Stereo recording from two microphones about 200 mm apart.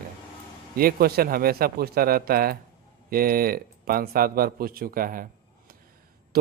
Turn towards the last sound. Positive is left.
turn(degrees=-45)  # may be behind; listen again after turning